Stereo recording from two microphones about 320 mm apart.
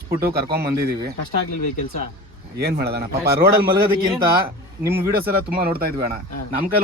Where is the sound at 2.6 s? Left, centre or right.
Right.